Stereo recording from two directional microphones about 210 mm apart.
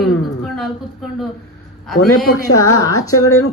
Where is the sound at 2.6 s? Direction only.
15° left (ahead or behind).